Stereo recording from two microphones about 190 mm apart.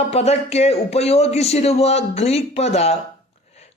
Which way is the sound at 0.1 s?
35° left (ahead or behind).